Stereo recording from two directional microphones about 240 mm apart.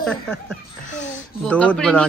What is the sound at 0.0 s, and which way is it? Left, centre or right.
A woman's voice, centre.